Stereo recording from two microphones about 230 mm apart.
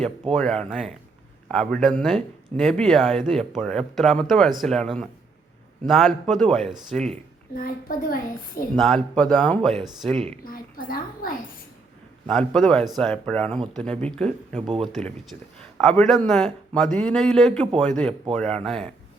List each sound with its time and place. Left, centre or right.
0.0 s speech: centre
7.5 s a child's voice: left
8.7 s speech: centre
10.4 s a child's voice: left
12.3 s speech: centre